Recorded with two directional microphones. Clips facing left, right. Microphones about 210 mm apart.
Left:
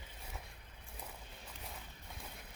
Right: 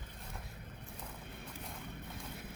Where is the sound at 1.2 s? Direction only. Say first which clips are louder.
Right 6 dB; 60° right (ahead or behind).